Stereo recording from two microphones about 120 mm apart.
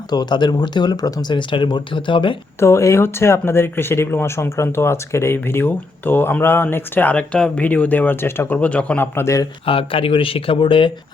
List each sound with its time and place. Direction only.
0.1 s speech: 35° left (ahead or behind)
2.6 s speech: 25° left (ahead or behind)
9.1 s speech: 25° left (ahead or behind)
9.6 s speech: 50° left (ahead or behind)